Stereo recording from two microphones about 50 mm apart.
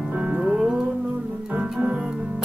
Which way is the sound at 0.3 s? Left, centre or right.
Centre.